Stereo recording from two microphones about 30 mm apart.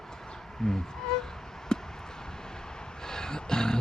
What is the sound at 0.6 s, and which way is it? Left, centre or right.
Music, centre.